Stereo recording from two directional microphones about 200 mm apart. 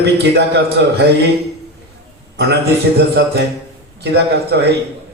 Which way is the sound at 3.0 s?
55° right (ahead or behind).